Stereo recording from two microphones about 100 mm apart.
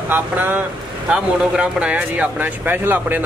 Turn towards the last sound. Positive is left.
turn(degrees=-20)  # may be behind; listen again after turning